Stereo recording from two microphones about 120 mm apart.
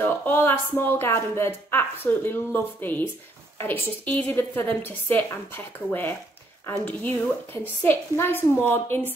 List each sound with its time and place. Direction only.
0.0 s speech: 15° left (ahead or behind)